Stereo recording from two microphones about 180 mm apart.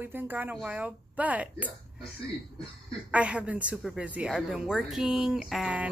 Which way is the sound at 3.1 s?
5° right (ahead or behind).